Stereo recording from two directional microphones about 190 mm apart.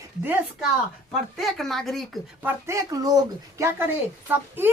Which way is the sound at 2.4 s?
15° right (ahead or behind).